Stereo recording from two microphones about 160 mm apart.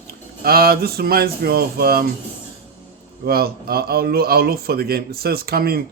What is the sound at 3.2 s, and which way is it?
A man's voice, 75° right (ahead or behind).